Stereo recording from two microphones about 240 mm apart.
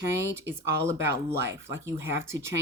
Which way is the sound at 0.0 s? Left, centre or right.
Centre.